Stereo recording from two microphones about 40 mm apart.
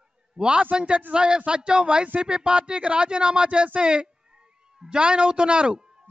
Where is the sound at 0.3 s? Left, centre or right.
Right.